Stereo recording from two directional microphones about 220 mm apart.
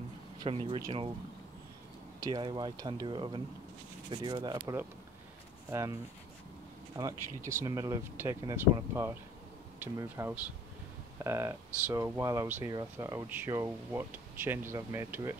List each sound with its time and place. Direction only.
0.4 s speech: 20° right (ahead or behind)
2.1 s speech: 20° right (ahead or behind)
7.0 s speech: 15° right (ahead or behind)